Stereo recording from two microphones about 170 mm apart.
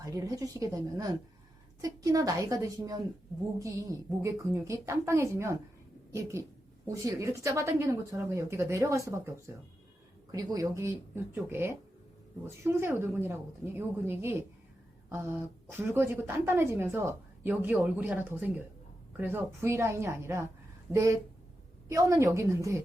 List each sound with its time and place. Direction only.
0.0 s a woman's voice: 20° right (ahead or behind)
6.8 s a woman's voice: 20° right (ahead or behind)
15.7 s a woman's voice: 15° right (ahead or behind)